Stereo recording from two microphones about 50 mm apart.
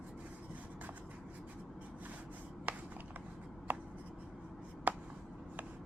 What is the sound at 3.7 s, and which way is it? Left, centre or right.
Writing, right.